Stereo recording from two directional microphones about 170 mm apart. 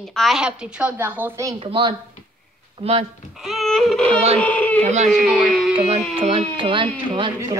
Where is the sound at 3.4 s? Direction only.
Centre (ahead or behind).